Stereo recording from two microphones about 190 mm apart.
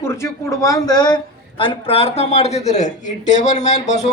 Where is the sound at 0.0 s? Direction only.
15° left (ahead or behind).